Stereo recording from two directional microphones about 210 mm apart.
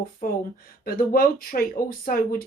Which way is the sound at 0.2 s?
45° left (ahead or behind).